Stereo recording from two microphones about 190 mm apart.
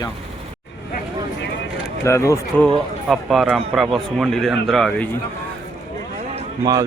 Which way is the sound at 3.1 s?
Centre (ahead or behind).